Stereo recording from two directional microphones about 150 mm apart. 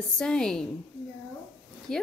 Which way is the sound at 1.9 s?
5° left (ahead or behind).